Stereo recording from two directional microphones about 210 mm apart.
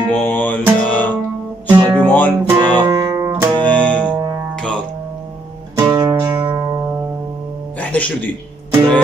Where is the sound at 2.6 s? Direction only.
15° right (ahead or behind).